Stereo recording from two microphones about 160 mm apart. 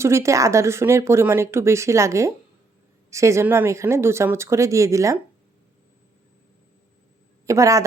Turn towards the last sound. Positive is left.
turn(degrees=-20)  # may be behind; listen again after turning